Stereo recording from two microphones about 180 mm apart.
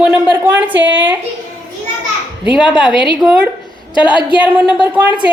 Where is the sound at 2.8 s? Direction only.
25° left (ahead or behind).